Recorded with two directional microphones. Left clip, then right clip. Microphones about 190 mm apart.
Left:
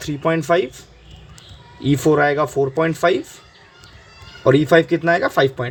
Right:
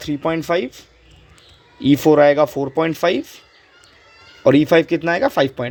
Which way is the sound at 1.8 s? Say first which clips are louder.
Right 4 dB; 30° right (ahead or behind).